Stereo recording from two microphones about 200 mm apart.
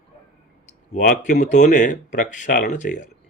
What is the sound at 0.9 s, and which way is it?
Speech, 40° left (ahead or behind).